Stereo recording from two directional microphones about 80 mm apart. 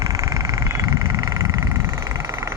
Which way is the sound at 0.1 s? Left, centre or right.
Right.